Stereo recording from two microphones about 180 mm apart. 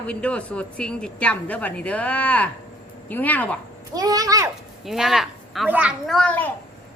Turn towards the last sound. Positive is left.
turn(degrees=5)  # may be behind; listen again after turning